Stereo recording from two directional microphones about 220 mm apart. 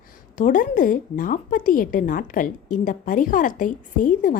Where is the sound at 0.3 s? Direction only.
35° left (ahead or behind).